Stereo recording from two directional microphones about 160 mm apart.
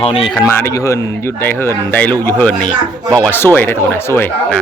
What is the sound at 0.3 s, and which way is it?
Speech, 15° left (ahead or behind).